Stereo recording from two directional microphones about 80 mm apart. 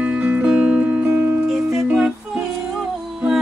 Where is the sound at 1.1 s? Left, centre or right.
Right.